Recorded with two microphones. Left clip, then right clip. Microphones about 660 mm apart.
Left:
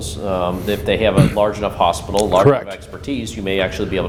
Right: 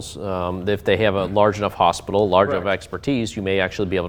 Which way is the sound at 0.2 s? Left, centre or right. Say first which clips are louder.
Left 5 dB; right.